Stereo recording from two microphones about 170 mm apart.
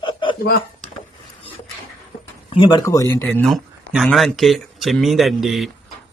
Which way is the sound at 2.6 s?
25° left (ahead or behind).